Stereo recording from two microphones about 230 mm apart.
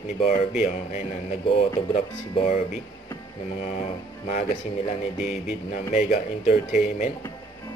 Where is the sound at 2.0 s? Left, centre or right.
Left.